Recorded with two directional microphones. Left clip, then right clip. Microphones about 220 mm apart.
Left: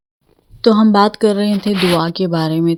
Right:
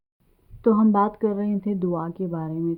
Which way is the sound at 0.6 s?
30° left (ahead or behind).